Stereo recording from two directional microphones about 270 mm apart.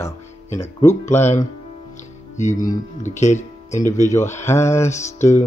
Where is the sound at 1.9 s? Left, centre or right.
Left.